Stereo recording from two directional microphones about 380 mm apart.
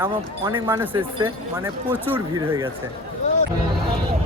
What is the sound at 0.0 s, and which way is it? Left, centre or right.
Speech, centre.